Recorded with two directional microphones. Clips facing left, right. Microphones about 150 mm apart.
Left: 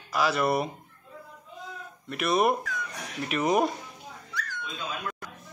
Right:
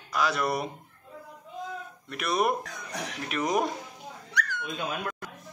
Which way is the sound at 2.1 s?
Centre (ahead or behind).